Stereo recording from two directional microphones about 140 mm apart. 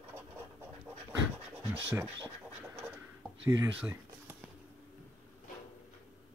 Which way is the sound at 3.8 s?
15° right (ahead or behind).